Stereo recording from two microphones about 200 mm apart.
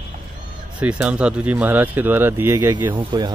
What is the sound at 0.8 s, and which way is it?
Speech, 5° right (ahead or behind).